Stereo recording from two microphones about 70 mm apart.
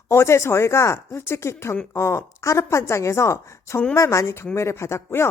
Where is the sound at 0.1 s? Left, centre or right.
Left.